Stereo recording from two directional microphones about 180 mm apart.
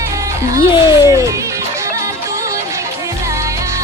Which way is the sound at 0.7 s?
20° left (ahead or behind).